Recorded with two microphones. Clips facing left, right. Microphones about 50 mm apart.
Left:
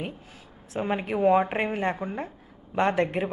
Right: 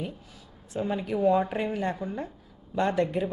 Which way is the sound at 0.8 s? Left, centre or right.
Left.